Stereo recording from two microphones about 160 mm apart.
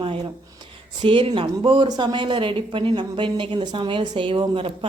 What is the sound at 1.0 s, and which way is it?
Speech, 35° right (ahead or behind).